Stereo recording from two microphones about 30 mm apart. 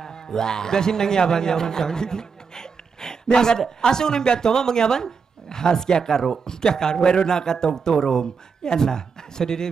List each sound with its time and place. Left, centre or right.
0.0 s a man's voice: left